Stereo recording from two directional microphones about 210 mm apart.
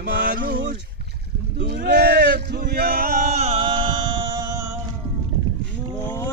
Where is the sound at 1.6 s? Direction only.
50° right (ahead or behind); by 4.6 s 20° right (ahead or behind).